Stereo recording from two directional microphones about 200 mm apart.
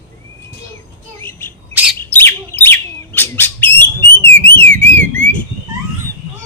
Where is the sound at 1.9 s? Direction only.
10° left (ahead or behind).